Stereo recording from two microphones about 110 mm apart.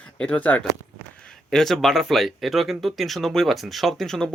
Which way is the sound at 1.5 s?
5° left (ahead or behind).